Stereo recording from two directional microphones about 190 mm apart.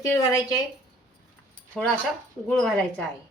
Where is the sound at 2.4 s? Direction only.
Centre (ahead or behind).